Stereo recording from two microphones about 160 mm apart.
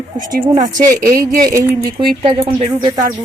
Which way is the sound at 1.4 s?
20° right (ahead or behind).